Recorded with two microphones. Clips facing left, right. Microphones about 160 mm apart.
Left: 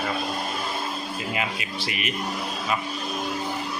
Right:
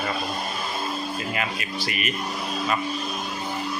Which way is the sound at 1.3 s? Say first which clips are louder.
Even; 15° left (ahead or behind).